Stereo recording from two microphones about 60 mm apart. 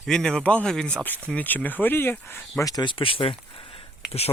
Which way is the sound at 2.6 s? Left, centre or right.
Left.